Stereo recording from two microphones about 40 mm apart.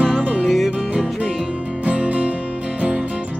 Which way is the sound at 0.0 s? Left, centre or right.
Right.